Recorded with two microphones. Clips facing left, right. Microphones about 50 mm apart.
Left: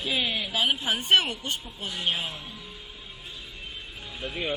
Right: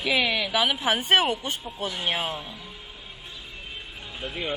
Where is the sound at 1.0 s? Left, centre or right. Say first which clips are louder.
Even; centre.